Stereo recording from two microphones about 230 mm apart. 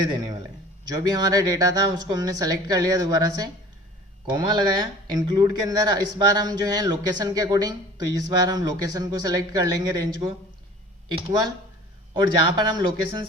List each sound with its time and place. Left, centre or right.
0.0 s speech: centre
11.3 s speech: centre